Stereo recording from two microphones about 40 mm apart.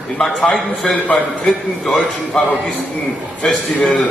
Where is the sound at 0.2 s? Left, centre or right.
Centre.